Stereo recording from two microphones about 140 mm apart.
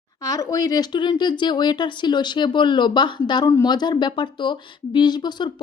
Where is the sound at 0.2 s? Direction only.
25° left (ahead or behind).